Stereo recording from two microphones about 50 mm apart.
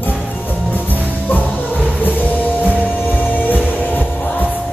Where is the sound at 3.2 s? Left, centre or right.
Left.